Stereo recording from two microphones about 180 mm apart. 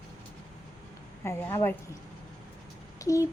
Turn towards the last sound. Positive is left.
turn(degrees=20)  # may be behind; listen again after turning